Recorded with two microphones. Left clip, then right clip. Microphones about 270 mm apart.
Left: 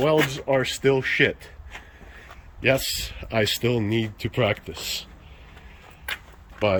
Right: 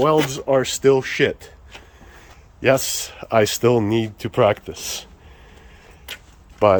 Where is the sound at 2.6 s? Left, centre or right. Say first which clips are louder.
Right 4 dB; centre.